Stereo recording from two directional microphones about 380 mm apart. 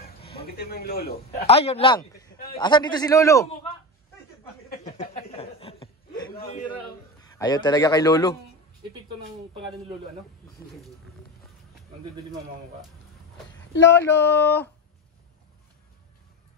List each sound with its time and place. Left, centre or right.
0.2 s a man's voice: centre
4.6 s chuckle: left
6.3 s a man's voice: centre
13.9 s a sound: centre